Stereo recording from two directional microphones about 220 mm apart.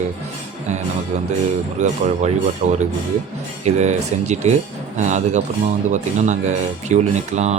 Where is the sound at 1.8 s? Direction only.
30° right (ahead or behind).